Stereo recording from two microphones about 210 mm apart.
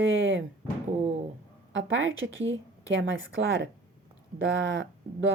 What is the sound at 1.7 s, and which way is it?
Speech, 60° right (ahead or behind).